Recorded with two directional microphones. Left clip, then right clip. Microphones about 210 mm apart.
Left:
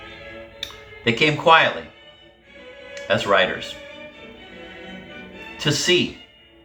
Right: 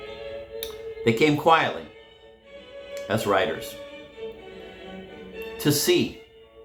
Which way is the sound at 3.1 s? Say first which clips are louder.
Left 5 dB; 55° right (ahead or behind).